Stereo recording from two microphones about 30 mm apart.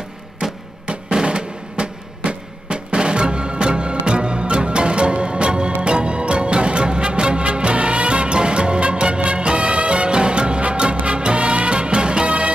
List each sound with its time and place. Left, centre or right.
0.4 s music: right